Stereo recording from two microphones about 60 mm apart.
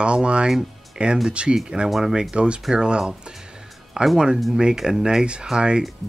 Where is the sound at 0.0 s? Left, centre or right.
Centre.